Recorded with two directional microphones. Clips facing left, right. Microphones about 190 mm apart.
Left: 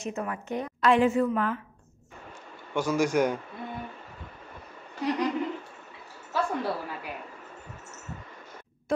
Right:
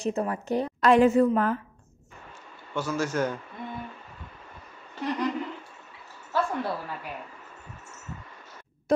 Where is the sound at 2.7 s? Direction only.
15° left (ahead or behind).